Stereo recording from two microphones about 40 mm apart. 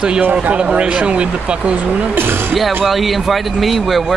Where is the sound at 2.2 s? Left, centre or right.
Right.